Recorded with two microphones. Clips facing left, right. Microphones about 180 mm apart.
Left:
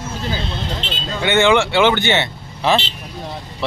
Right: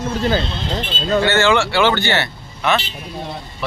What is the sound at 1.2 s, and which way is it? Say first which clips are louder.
Speech: left 2 dB; 15° left (ahead or behind).